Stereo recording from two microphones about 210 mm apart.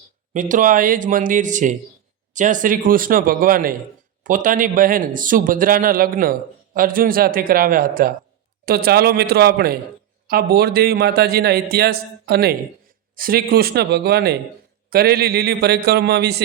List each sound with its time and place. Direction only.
0.3 s a man's voice: 35° right (ahead or behind)